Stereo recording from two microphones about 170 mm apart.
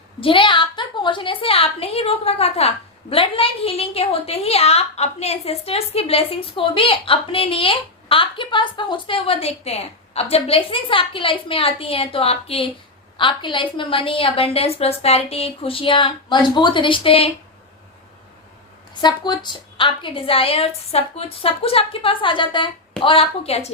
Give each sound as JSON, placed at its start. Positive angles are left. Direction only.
{"t": 0.2, "sound": "a woman's voice", "side_deg": 30}
{"t": 19.0, "sound": "a woman's voice", "side_deg": 25}